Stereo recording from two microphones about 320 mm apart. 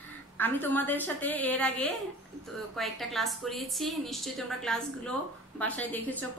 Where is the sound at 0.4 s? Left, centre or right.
Centre.